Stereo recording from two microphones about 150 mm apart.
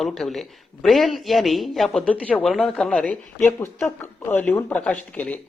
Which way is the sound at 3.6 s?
15° left (ahead or behind).